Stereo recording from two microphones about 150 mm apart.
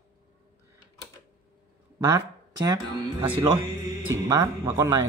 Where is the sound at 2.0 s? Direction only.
25° right (ahead or behind).